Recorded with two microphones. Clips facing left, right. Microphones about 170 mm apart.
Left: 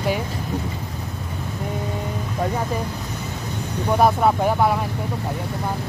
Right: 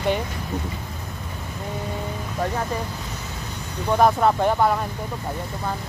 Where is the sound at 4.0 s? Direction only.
5° left (ahead or behind).